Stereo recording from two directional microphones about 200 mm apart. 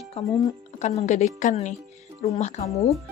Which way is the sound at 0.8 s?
35° left (ahead or behind).